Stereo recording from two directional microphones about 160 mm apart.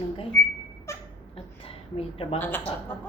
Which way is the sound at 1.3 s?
35° left (ahead or behind).